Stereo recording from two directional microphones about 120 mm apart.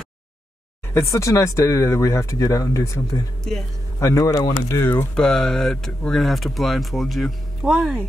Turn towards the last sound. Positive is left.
turn(degrees=-5)  # may be behind; listen again after turning